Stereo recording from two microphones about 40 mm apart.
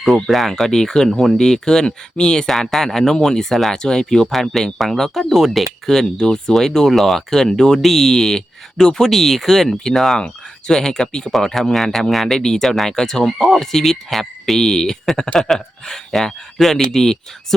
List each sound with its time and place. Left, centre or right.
0.3 s speech: centre
0.5 s speech: centre
2.5 s speech: centre
11.4 s speech: centre
12.6 s speech: centre